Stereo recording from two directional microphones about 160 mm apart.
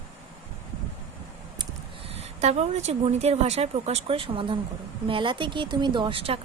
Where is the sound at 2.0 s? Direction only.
40° right (ahead or behind).